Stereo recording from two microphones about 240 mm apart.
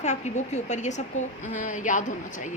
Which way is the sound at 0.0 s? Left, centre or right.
Left.